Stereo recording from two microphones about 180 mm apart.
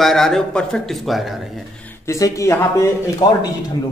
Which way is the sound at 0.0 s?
Centre (ahead or behind).